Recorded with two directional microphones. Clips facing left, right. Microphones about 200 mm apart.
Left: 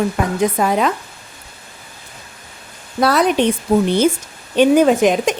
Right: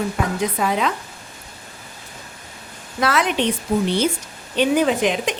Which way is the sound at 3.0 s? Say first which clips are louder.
Left 5 dB; 40° left (ahead or behind).